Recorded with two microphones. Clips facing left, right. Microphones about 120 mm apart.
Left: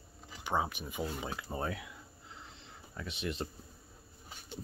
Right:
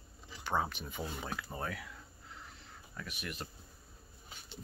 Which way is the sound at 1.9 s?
20° left (ahead or behind).